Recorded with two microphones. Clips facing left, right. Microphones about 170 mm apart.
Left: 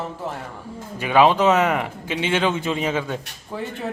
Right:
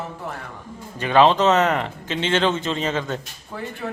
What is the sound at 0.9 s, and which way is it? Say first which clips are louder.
Speech: even; 10° left (ahead or behind).